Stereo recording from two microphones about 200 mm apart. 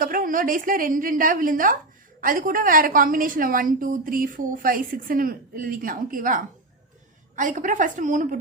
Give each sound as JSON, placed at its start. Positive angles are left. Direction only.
{"t": 0.0, "sound": "a woman's voice", "side_deg": -45}